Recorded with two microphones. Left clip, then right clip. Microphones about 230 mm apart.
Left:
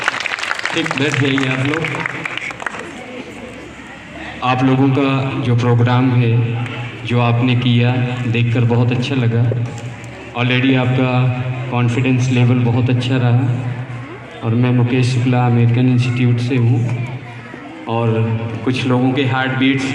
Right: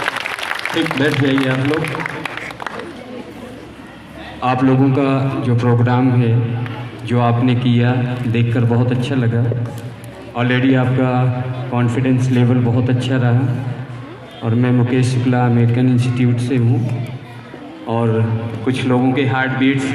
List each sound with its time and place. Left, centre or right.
0.8 s a man's voice: right
4.4 s a man's voice: right
10.3 s a man's voice: right
14.4 s a man's voice: right
17.8 s a man's voice: right